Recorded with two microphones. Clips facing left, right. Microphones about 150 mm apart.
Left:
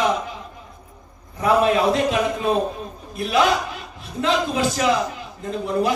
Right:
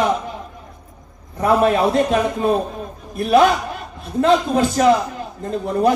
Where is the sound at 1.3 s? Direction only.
50° right (ahead or behind).